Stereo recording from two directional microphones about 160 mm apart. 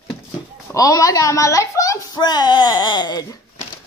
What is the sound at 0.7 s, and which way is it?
Speech, 20° left (ahead or behind).